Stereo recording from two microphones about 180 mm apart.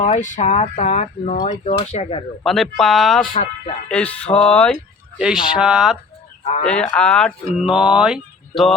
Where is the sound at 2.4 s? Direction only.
Centre (ahead or behind).